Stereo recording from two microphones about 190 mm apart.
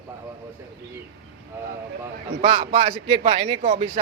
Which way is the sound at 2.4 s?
35° right (ahead or behind).